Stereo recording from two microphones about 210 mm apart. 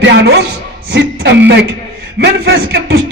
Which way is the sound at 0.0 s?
50° right (ahead or behind).